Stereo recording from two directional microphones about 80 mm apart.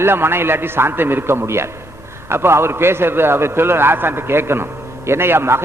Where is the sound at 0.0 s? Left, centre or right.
Right.